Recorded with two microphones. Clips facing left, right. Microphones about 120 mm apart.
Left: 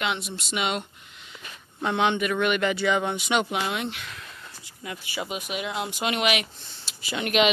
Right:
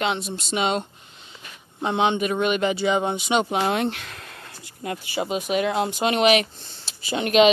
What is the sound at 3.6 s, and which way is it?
Speech, 45° right (ahead or behind).